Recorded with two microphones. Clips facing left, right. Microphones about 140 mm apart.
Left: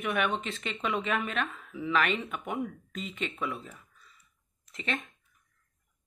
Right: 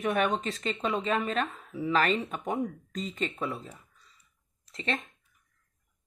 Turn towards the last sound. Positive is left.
turn(degrees=-30)  # may be behind; listen again after turning